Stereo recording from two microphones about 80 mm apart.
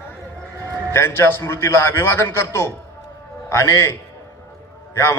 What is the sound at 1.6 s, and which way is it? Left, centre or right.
A man's voice, left.